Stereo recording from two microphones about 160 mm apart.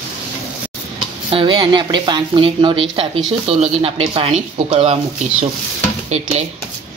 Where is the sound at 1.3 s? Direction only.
30° right (ahead or behind).